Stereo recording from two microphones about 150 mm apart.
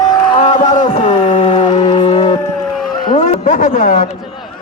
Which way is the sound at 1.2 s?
55° left (ahead or behind).